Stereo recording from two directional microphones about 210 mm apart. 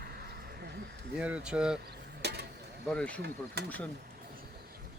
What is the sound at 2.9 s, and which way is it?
Speech, 5° left (ahead or behind).